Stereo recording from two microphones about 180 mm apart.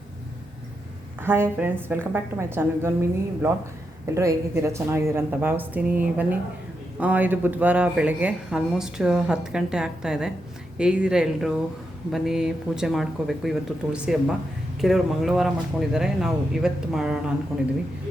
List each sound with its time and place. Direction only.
1.2 s speech: 10° right (ahead or behind)